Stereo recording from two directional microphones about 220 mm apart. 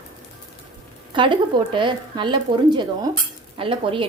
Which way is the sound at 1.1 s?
20° right (ahead or behind).